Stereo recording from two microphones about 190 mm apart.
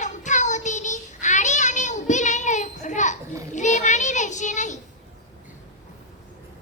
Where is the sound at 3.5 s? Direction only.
40° left (ahead or behind).